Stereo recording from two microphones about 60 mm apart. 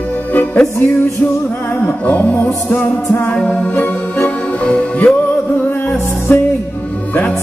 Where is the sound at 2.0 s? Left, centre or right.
Left.